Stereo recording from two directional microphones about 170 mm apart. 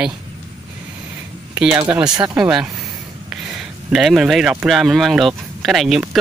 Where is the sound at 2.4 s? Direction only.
5° right (ahead or behind).